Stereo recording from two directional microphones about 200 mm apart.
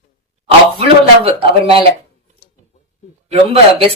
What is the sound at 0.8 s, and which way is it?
Speech, 25° right (ahead or behind).